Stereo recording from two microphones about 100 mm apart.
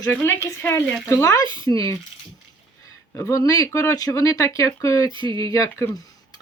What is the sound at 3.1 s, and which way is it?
Speech, 30° left (ahead or behind).